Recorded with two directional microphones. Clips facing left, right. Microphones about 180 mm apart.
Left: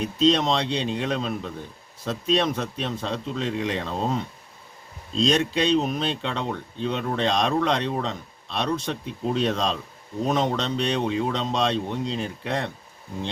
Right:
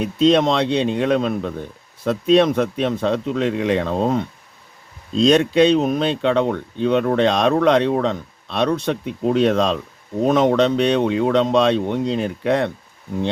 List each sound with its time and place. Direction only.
0.2 s speech: 55° right (ahead or behind)
5.2 s speech: 60° right (ahead or behind)